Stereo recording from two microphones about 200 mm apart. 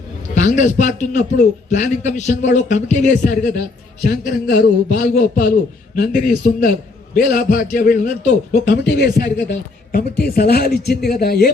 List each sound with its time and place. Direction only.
0.4 s a man's voice: 40° left (ahead or behind)
4.0 s a man's voice: 50° left (ahead or behind)
8.6 s a man's voice: 55° left (ahead or behind)